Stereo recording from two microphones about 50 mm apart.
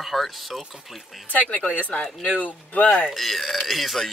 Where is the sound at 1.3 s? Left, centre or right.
Left.